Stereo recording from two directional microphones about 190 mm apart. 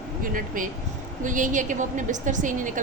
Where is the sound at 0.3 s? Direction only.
45° right (ahead or behind).